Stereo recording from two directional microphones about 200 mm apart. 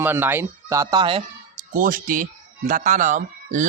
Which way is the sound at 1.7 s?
45° right (ahead or behind).